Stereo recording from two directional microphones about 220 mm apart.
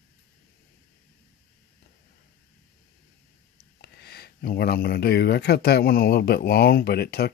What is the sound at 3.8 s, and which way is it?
Speech, 45° left (ahead or behind).